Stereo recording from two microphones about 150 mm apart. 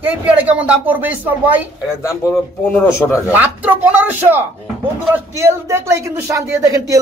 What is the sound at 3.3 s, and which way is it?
A man's voice, 15° right (ahead or behind).